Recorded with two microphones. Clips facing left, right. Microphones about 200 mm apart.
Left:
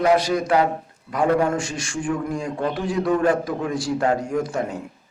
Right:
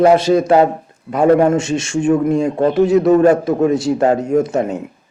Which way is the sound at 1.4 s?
25° right (ahead or behind).